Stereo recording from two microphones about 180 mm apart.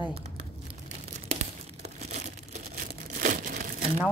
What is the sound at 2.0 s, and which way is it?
Crumpling, 40° right (ahead or behind).